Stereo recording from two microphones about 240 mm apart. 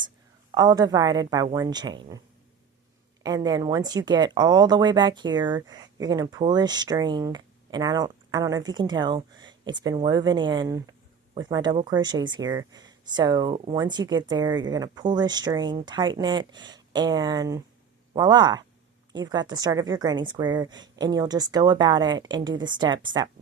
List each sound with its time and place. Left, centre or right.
0.5 s speech: centre
3.2 s speech: centre